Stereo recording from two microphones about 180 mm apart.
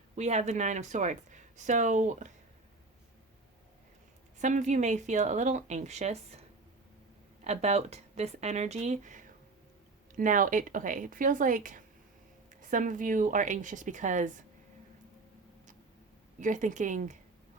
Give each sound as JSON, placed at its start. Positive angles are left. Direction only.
{"t": 0.2, "sound": "speech", "side_deg": -40}
{"t": 4.4, "sound": "speech", "side_deg": -40}
{"t": 7.4, "sound": "a woman's voice", "side_deg": -35}
{"t": 16.4, "sound": "a woman's voice", "side_deg": -45}